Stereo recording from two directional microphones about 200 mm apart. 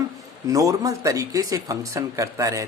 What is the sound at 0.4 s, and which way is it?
Speech, 15° right (ahead or behind).